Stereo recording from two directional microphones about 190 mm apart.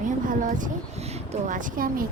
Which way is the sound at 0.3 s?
45° right (ahead or behind).